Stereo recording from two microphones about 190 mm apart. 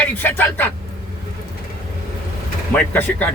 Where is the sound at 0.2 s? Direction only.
10° left (ahead or behind).